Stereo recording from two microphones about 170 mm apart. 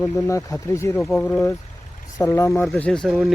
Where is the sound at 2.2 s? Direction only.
20° left (ahead or behind).